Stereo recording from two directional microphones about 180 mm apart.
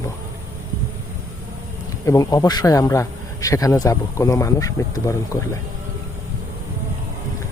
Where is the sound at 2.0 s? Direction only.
20° left (ahead or behind).